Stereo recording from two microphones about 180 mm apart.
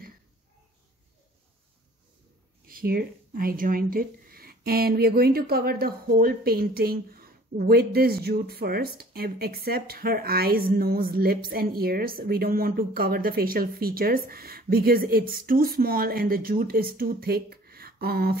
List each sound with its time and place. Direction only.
2.7 s speech: 55° right (ahead or behind)